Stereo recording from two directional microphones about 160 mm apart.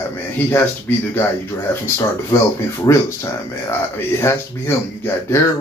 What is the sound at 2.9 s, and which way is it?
Speech, 25° left (ahead or behind).